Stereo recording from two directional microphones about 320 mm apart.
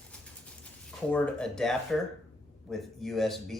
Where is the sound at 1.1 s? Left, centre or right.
Centre.